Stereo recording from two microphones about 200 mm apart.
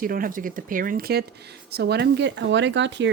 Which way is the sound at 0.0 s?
45° right (ahead or behind).